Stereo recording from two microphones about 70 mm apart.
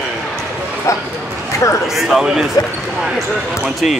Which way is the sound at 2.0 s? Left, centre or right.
Centre.